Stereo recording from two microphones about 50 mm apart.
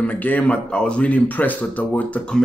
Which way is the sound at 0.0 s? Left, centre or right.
Left.